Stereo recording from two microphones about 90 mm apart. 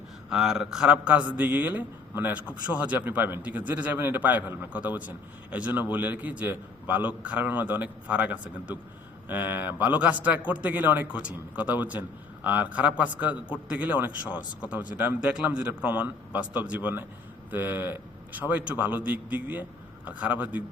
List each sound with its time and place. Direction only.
0.3 s a man's voice: 5° right (ahead or behind)